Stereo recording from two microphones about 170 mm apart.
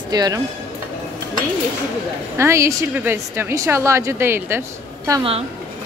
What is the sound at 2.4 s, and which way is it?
A woman's voice, 15° right (ahead or behind).